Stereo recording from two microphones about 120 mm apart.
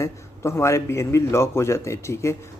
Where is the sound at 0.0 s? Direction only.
25° left (ahead or behind).